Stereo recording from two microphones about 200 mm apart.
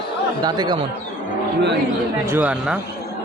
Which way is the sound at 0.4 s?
20° right (ahead or behind).